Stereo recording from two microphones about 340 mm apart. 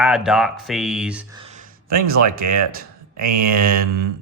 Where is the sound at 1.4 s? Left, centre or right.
Centre.